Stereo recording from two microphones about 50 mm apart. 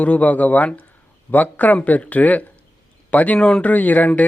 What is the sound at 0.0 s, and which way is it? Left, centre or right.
Speech, left.